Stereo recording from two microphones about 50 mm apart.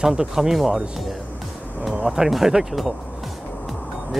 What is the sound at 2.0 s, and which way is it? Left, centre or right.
Speech, centre.